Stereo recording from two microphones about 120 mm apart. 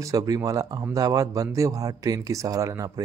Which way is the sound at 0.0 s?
30° right (ahead or behind).